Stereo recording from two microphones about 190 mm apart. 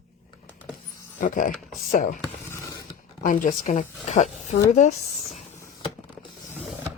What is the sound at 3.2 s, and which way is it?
A woman's voice, 45° left (ahead or behind).